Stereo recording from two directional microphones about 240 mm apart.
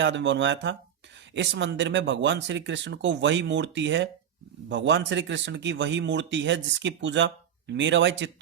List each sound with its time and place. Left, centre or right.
0.0 s speech: right